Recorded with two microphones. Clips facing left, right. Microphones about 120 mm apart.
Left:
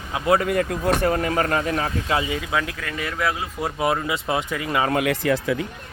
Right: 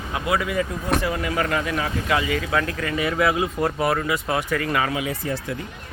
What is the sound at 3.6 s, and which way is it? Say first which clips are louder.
Speech: right 1 dB; 15° left (ahead or behind).